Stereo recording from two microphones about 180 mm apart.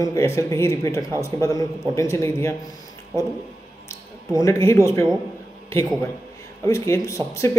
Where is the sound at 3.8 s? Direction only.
15° left (ahead or behind).